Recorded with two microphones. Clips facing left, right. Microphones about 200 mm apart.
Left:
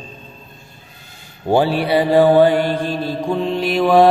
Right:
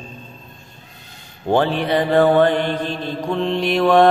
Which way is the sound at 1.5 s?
10° left (ahead or behind).